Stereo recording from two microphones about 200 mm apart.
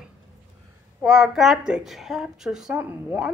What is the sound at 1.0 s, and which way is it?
A woman's voice, centre (ahead or behind).